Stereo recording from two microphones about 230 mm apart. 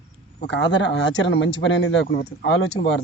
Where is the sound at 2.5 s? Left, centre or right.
Left.